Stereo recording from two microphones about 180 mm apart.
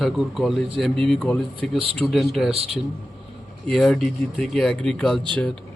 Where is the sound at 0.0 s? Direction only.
Centre (ahead or behind).